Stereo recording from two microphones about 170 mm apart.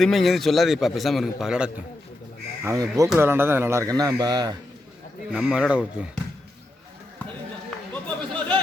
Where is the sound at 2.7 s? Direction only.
20° right (ahead or behind).